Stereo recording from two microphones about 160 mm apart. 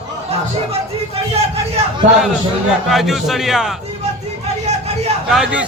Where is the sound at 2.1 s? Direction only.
Centre (ahead or behind).